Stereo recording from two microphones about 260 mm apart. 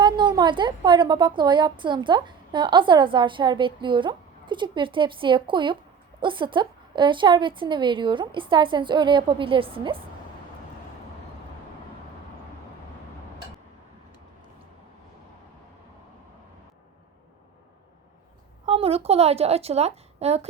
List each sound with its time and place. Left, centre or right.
0.0 s a woman's voice: centre
18.6 s a woman's voice: right